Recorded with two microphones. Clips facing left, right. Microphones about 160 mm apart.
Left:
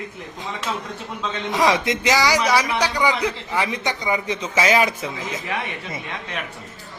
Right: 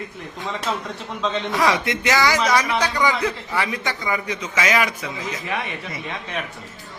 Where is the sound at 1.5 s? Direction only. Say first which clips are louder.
Left 3 dB; 20° left (ahead or behind).